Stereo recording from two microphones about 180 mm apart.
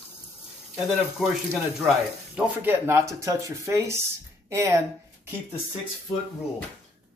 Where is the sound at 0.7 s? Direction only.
Centre (ahead or behind).